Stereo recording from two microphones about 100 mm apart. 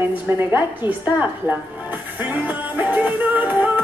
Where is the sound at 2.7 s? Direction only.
15° right (ahead or behind).